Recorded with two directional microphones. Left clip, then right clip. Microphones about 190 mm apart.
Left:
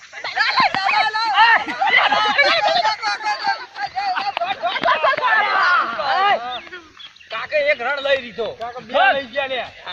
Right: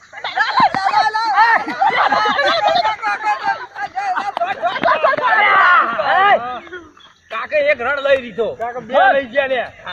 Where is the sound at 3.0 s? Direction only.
50° right (ahead or behind).